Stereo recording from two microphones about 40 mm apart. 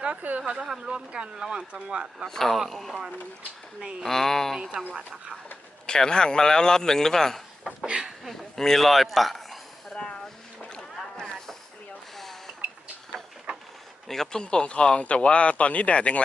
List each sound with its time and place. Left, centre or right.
0.2 s a woman's voice: right
0.8 s speech: right
2.2 s a man's voice: centre
4.0 s a man's voice: centre
4.6 s speech: right
5.8 s a man's voice: centre
7.9 s a woman's voice: centre
8.3 s a man's voice: centre
9.9 s a sound: left
10.8 s boat: centre
12.1 s a sound: centre
13.5 s a sound: right
14.1 s a man's voice: centre
14.4 s speech: left